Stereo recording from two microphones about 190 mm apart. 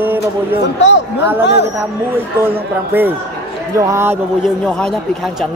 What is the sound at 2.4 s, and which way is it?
Speech, 10° right (ahead or behind).